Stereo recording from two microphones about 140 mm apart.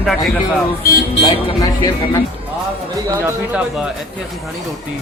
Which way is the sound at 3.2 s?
10° right (ahead or behind).